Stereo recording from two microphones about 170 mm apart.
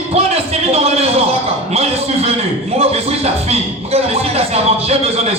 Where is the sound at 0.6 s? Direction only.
35° right (ahead or behind).